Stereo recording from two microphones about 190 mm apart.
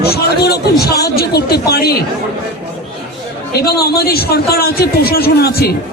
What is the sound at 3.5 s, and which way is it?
Speech, 55° left (ahead or behind).